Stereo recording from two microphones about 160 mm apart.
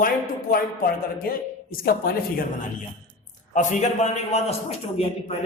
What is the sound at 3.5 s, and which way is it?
A man's voice, 45° left (ahead or behind).